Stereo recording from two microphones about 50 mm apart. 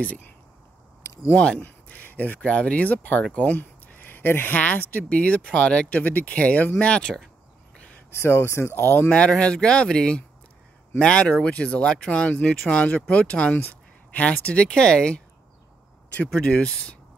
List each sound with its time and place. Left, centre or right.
1.0 s a sound: left
1.3 s speech: left
3.3 s a sound: left
4.6 s speech: left
8.1 s speech: left
8.8 s speech: left
9.4 s speech: centre
16.3 s speech: left